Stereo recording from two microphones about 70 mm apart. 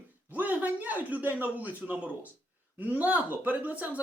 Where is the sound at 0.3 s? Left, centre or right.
Right.